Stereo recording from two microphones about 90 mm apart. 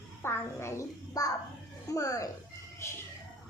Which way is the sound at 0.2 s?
30° left (ahead or behind).